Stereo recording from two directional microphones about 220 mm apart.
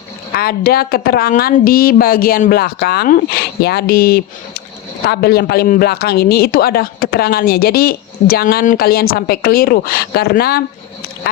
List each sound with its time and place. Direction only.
0.3 s speech: 45° left (ahead or behind)